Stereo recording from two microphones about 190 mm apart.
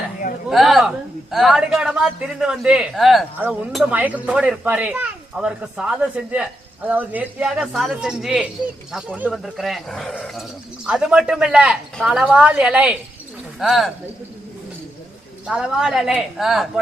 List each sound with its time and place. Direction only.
0.5 s a woman's voice: centre (ahead or behind)
15.4 s a woman's voice: 5° right (ahead or behind)